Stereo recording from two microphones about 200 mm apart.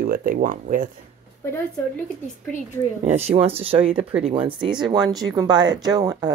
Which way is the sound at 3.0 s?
30° right (ahead or behind).